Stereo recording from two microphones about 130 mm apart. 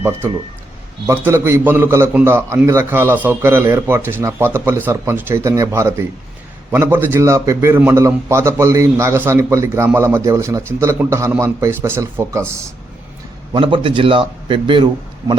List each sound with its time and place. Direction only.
1.0 s a man's voice: 20° right (ahead or behind)
13.5 s a man's voice: 40° right (ahead or behind)